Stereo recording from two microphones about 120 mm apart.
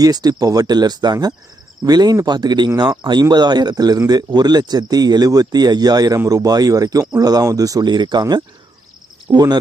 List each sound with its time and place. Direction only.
0.0 s speech: 35° right (ahead or behind)